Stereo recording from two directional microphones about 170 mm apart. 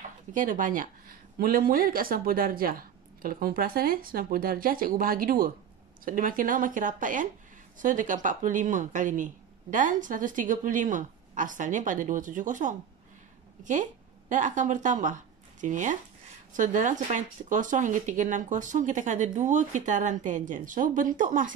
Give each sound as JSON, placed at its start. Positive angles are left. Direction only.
{"t": 0.3, "sound": "speech", "side_deg": -50}
{"t": 14.3, "sound": "speech", "side_deg": -45}